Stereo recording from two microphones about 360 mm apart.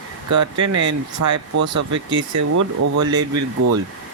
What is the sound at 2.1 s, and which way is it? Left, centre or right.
Speech, right.